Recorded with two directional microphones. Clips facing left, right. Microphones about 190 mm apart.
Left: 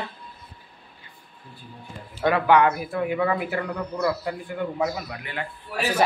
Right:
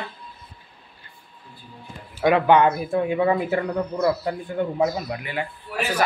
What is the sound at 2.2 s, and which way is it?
Speech, 20° right (ahead or behind).